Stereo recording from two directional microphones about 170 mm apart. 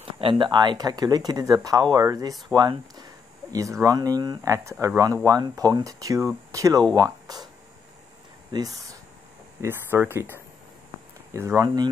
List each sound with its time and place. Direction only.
0.2 s speech: 30° right (ahead or behind)
8.5 s speech: 20° right (ahead or behind)